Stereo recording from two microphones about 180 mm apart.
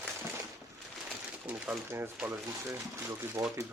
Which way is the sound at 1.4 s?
10° right (ahead or behind).